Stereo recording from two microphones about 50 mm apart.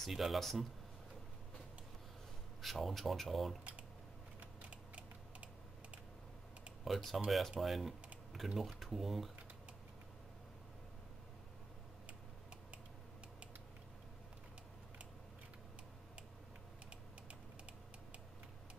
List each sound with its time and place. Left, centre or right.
0.0 s speech: centre
2.6 s speech: centre
4.4 s typing: right
6.8 s speech: centre